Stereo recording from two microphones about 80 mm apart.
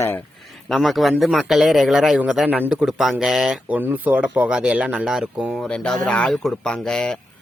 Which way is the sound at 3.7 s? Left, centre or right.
Right.